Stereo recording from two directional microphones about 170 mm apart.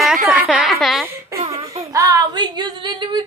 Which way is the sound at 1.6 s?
40° right (ahead or behind).